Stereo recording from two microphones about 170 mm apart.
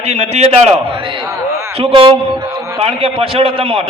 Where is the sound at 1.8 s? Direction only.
30° right (ahead or behind).